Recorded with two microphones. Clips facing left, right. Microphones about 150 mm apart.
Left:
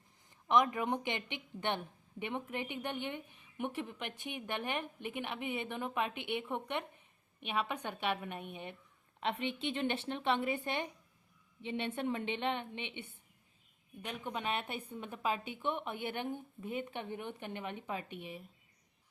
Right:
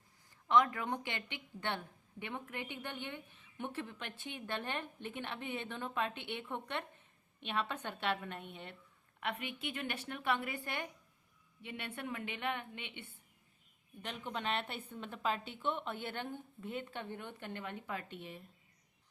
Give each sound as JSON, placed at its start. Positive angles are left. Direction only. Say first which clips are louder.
{"t": 0.4, "sound": "a woman's voice", "louder": "left 1 dB", "side_deg": 20}
{"t": 9.2, "sound": "a woman's voice", "louder": "left 5 dB", "side_deg": 25}